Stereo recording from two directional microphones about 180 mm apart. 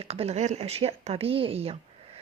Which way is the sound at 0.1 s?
35° right (ahead or behind).